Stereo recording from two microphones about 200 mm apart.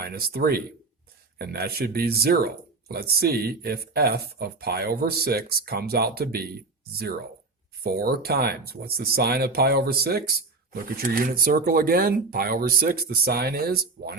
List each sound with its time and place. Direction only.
0.0 s speech: 50° right (ahead or behind)
7.9 s speech: 50° right (ahead or behind)